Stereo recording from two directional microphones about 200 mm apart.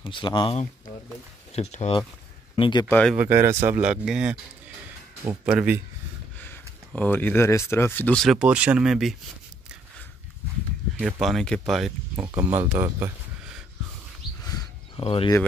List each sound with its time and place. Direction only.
0.0 s speech: 25° left (ahead or behind)
2.9 s speech: 5° left (ahead or behind)
3.2 s speech: 10° right (ahead or behind)
7.0 s speech: 10° left (ahead or behind)
11.0 s speech: centre (ahead or behind)
14.4 s wild animals: 15° left (ahead or behind)
15.0 s speech: 25° left (ahead or behind)